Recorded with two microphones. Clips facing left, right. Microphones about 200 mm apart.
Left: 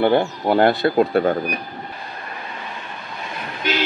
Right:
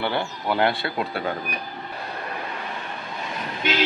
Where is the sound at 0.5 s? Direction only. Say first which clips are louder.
Left 7 dB; 45° left (ahead or behind).